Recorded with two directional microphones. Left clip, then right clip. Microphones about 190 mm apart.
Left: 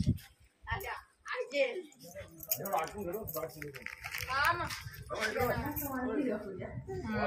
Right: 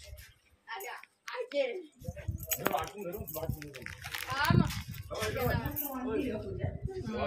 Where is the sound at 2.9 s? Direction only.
20° right (ahead or behind).